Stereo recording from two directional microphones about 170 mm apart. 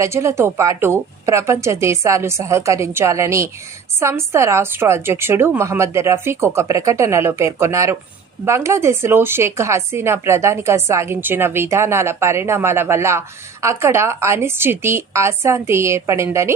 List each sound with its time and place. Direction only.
0.0 s speech: 15° right (ahead or behind)